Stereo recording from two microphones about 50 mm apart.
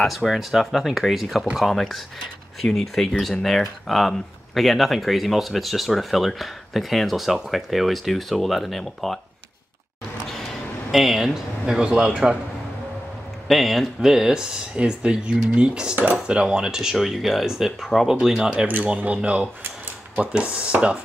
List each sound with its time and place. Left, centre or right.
0.0 s speech: centre
10.9 s speech: centre
11.6 s speech: centre
13.5 s speech: centre
14.8 s speech: right